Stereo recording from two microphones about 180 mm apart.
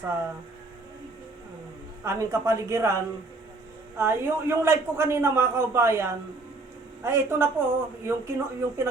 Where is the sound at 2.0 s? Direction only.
15° right (ahead or behind).